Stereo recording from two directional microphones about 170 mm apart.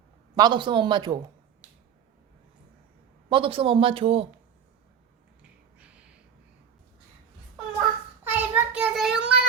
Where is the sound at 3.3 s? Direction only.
30° right (ahead or behind).